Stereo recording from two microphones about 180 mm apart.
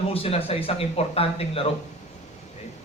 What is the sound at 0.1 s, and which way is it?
A man's voice, 35° left (ahead or behind).